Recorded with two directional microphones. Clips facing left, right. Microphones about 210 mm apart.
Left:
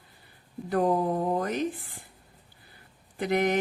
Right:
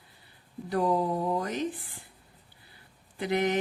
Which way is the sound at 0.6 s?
50° left (ahead or behind).